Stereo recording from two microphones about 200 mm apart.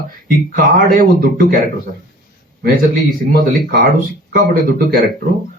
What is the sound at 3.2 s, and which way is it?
Speech, 50° right (ahead or behind).